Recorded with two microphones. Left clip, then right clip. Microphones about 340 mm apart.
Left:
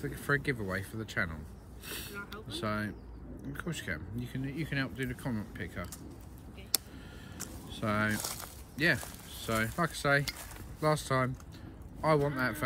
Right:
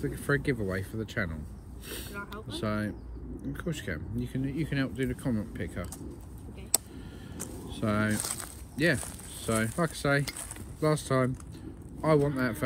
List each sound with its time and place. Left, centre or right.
0.0 s speech: centre
7.3 s a sound: centre
7.7 s speech: centre
8.2 s speech: right
8.7 s speech: centre